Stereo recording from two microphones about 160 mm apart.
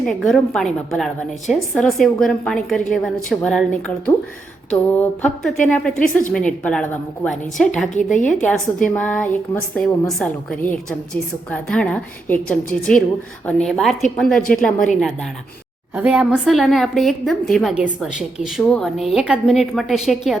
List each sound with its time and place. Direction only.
0.0 s a woman's voice: 5° left (ahead or behind)
7.9 s a woman's voice: 55° left (ahead or behind)
8.3 s a woman's voice: 5° left (ahead or behind)